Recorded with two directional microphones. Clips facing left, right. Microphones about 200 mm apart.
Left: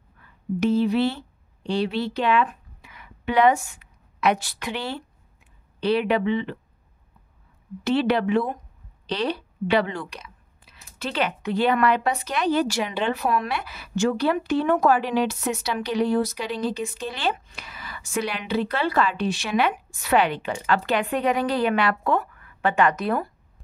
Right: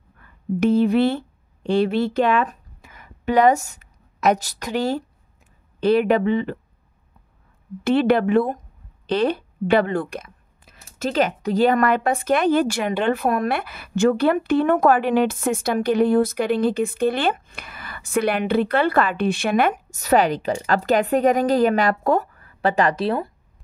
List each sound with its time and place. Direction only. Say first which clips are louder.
0.2 s a woman's voice: right 3 dB; 50° right (ahead or behind)
7.8 s speech: right 4 dB; 50° right (ahead or behind); by 23.3 s 25° right (ahead or behind)